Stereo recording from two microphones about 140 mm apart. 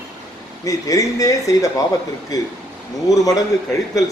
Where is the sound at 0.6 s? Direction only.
25° left (ahead or behind).